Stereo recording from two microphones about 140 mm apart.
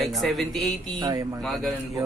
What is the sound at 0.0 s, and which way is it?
Speech, centre (ahead or behind).